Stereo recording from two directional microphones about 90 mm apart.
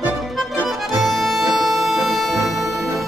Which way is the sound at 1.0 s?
Centre (ahead or behind).